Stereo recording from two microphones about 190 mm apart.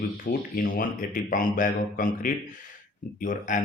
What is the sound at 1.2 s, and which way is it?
Speech, 45° left (ahead or behind).